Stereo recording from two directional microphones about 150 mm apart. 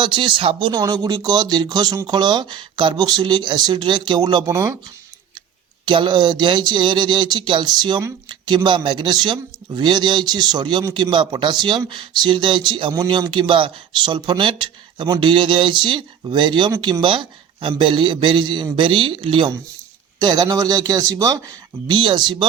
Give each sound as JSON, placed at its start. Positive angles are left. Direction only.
{"t": 0.0, "sound": "speech", "side_deg": -35}
{"t": 5.8, "sound": "speech", "side_deg": -30}